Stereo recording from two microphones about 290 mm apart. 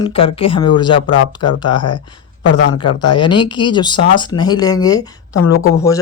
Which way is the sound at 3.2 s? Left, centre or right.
Centre.